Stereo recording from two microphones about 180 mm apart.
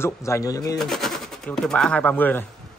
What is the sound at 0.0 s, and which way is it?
Speech, 15° left (ahead or behind).